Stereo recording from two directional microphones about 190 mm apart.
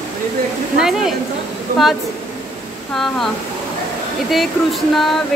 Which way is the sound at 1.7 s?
50° right (ahead or behind).